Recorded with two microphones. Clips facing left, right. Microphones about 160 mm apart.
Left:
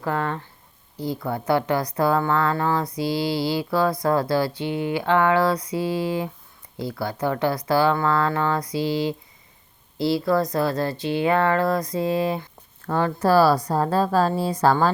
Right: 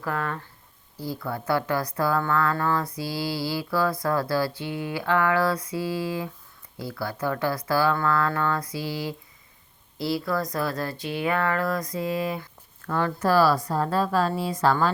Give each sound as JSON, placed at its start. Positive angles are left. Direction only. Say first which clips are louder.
{"t": 0.0, "sound": "speech", "louder": "left 4 dB", "side_deg": 25}